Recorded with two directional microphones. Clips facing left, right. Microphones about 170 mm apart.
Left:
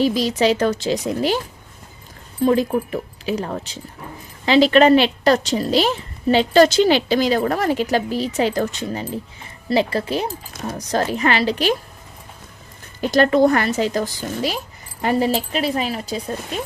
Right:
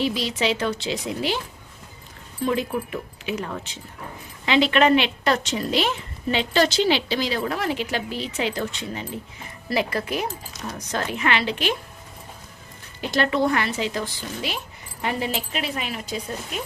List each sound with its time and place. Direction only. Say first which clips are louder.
0.0 s a woman's voice: left 6 dB; 40° left (ahead or behind)
2.4 s a woman's voice: left 7 dB; 40° left (ahead or behind)
9.6 s speech: left 5 dB; 30° left (ahead or behind)
10.5 s a woman's voice: left 6 dB; 45° left (ahead or behind)
13.0 s a woman's voice: left 7 dB; 45° left (ahead or behind)